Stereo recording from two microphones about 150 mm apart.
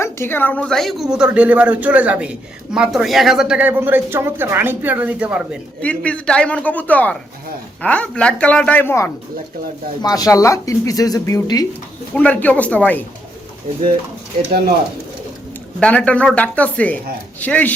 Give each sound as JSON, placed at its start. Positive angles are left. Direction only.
{"t": 0.0, "sound": "a woman's voice", "side_deg": 15}
{"t": 5.8, "sound": "a man's voice", "side_deg": 10}
{"t": 10.0, "sound": "speech", "side_deg": 25}
{"t": 12.1, "sound": "a man's voice", "side_deg": 10}
{"t": 15.8, "sound": "a man's voice", "side_deg": 10}